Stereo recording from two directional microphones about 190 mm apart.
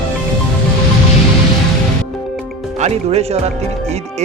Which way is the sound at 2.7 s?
35° right (ahead or behind).